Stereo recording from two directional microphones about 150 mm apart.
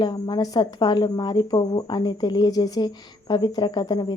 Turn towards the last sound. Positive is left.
turn(degrees=30)  # may be behind; listen again after turning